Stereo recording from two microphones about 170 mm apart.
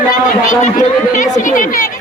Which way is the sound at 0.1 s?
50° left (ahead or behind).